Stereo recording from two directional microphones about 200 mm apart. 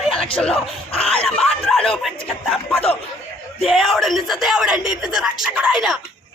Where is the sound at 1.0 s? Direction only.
Centre (ahead or behind).